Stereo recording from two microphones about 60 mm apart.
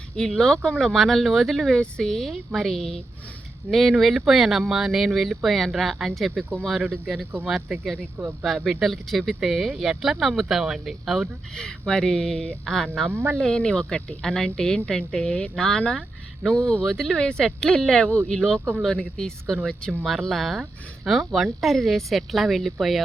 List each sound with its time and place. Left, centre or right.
0.2 s speech: centre
7.5 s speech: centre
11.5 s speech: centre
13.1 s speech: right
13.3 s speech: centre